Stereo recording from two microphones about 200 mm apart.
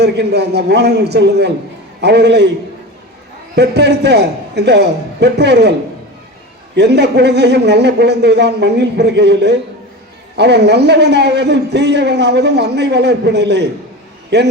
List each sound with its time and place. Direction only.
0.0 s a man's voice: 55° right (ahead or behind)
3.5 s a man's voice: 55° right (ahead or behind)
6.7 s a man's voice: 55° right (ahead or behind)